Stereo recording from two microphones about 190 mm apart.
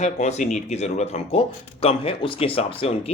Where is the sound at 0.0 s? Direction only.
35° left (ahead or behind).